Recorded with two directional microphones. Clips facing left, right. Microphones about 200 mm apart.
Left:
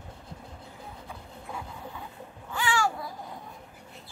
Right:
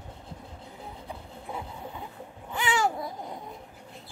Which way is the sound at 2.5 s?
20° right (ahead or behind).